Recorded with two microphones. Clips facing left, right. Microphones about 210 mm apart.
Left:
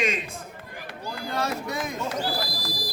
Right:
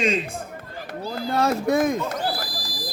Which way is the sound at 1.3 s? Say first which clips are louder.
Right 9 dB; 50° right (ahead or behind).